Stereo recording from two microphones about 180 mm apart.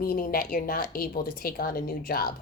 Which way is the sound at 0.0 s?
55° left (ahead or behind).